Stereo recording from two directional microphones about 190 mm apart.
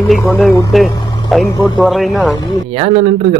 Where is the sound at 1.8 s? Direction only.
Centre (ahead or behind).